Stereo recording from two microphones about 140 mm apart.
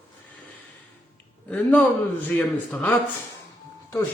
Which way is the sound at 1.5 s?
10° left (ahead or behind).